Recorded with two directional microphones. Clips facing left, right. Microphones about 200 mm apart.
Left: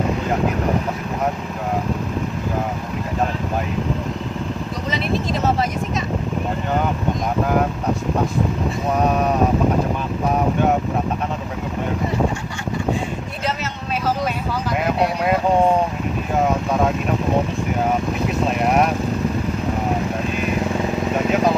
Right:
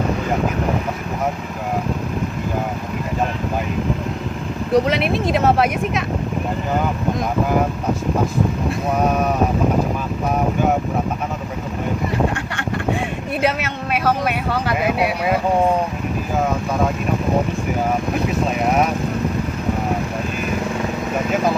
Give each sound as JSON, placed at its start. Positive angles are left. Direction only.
{"t": 4.7, "sound": "speech", "side_deg": -65}
{"t": 13.4, "sound": "speech", "side_deg": -60}
{"t": 14.8, "sound": "speech", "side_deg": -5}